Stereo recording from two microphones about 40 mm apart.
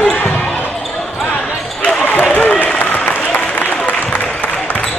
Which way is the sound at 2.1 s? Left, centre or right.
Left.